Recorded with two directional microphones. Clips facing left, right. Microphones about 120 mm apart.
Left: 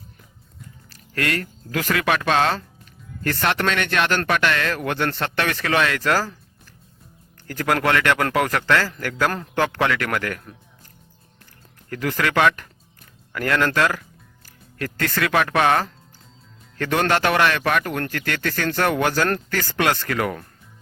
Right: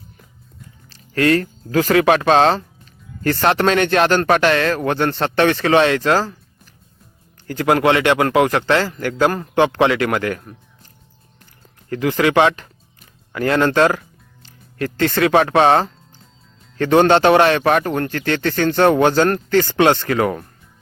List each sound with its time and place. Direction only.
0.9 s speech: 25° right (ahead or behind)
7.4 s speech: 20° right (ahead or behind)
11.9 s speech: 20° right (ahead or behind)